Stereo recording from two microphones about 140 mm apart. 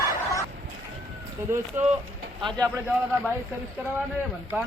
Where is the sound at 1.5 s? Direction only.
20° right (ahead or behind).